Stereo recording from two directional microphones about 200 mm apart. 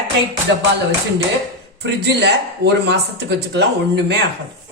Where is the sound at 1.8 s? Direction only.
55° right (ahead or behind).